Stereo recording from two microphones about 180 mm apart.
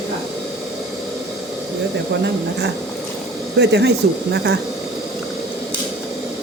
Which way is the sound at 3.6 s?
70° right (ahead or behind).